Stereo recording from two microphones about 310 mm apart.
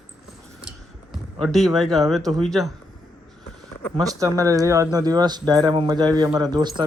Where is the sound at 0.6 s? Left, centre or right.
Centre.